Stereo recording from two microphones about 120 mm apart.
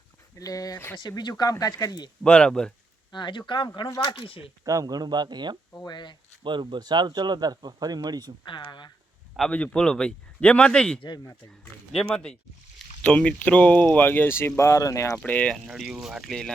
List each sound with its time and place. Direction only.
0.3 s speech: 30° left (ahead or behind)
2.2 s speech: 10° left (ahead or behind)
3.1 s speech: 40° left (ahead or behind)
3.8 s speech: 30° left (ahead or behind)
4.1 s speech: 45° left (ahead or behind)
4.6 s speech: 30° right (ahead or behind)
5.7 s speech: 35° left (ahead or behind)
6.4 s speech: 40° right (ahead or behind)
8.4 s speech: 40° left (ahead or behind)
9.5 s speech: 10° left (ahead or behind)
15.2 s speech: 10° left (ahead or behind)
15.5 s speech: 5° right (ahead or behind)